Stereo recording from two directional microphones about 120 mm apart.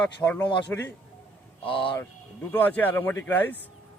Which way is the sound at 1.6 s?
45° left (ahead or behind).